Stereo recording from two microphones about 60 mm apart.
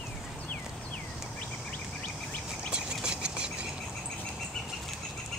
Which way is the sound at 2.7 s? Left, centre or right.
Centre.